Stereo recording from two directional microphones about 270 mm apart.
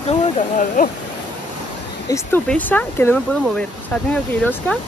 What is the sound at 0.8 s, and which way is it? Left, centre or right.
Speech, left.